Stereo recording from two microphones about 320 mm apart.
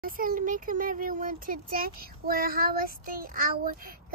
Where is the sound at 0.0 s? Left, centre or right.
Right.